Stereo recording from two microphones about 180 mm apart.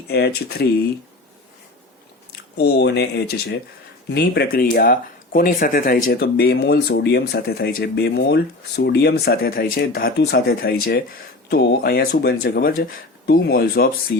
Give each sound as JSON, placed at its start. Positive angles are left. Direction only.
{"t": 0.1, "sound": "speech", "side_deg": 65}
{"t": 2.6, "sound": "speech", "side_deg": 70}